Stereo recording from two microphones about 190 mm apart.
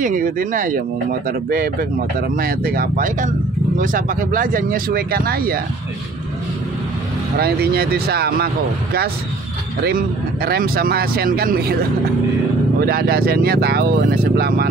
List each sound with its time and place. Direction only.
0.0 s speech: 45° right (ahead or behind)
7.3 s speech: 55° right (ahead or behind)
9.8 s speech: 55° right (ahead or behind)
12.8 s speech: 55° right (ahead or behind)